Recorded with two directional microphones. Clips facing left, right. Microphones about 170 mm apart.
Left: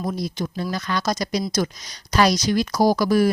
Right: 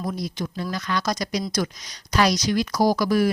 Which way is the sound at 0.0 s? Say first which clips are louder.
Left 2 dB; 30° left (ahead or behind).